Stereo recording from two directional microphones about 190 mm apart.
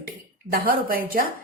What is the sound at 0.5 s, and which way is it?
Speech, 50° right (ahead or behind).